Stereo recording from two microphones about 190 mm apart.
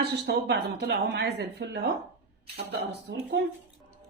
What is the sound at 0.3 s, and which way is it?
Speech, 65° right (ahead or behind).